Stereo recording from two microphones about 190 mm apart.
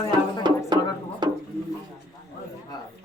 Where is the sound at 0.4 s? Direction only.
25° right (ahead or behind).